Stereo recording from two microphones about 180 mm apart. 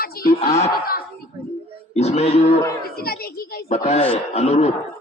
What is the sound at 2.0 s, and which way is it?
Speech, 35° left (ahead or behind).